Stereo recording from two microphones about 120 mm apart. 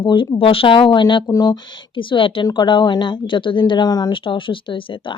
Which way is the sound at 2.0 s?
45° left (ahead or behind).